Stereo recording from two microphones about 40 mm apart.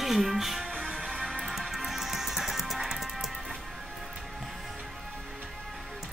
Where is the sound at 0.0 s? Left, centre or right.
Centre.